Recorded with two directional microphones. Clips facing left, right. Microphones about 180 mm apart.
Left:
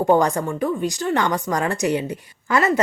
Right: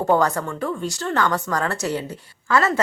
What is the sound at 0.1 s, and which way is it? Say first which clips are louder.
A woman's voice: left 1 dB; 15° left (ahead or behind).